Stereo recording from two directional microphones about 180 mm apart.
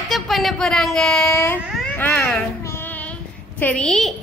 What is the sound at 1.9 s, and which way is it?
A child's voice, 10° left (ahead or behind).